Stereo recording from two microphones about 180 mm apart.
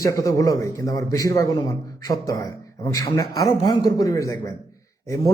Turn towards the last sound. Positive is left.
turn(degrees=15)  # may be behind; listen again after turning